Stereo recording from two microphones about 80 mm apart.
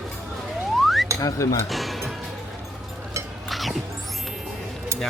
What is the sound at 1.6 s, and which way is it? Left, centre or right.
Speech, centre.